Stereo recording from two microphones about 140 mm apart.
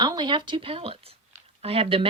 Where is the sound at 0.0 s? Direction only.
30° right (ahead or behind).